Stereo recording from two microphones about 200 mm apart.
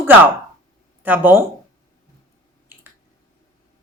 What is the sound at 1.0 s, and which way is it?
Speech, 10° right (ahead or behind).